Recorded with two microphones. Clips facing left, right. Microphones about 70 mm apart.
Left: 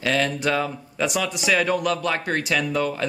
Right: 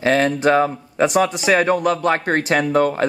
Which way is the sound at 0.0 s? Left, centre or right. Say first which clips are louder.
Right 7 dB; right.